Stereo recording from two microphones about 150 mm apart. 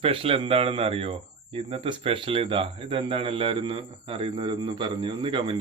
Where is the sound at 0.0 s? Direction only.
40° right (ahead or behind).